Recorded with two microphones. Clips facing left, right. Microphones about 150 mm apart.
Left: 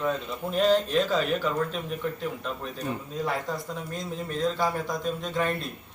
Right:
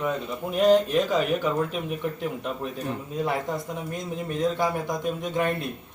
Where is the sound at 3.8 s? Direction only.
15° right (ahead or behind).